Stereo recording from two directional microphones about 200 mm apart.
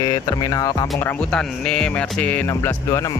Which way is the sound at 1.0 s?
5° left (ahead or behind).